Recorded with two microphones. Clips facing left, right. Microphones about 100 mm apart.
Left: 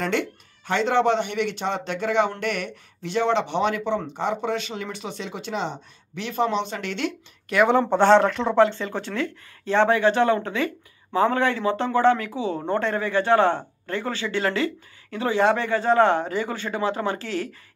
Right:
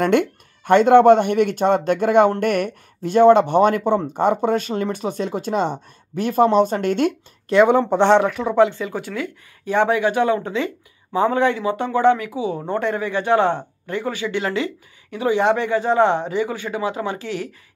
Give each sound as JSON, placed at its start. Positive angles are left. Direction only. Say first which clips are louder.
{"t": 0.0, "sound": "speech", "louder": "right 8 dB", "side_deg": -55}
{"t": 7.5, "sound": "speech", "louder": "right 6 dB", "side_deg": -30}
{"t": 7.9, "sound": "a man's voice", "louder": "right 1 dB", "side_deg": -15}